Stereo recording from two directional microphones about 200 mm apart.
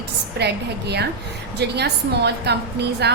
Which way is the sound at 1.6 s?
55° right (ahead or behind).